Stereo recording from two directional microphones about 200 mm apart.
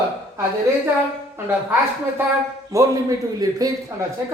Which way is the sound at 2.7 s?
15° right (ahead or behind).